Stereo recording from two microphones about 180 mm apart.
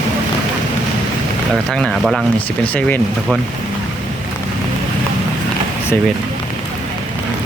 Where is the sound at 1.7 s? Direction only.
Centre (ahead or behind).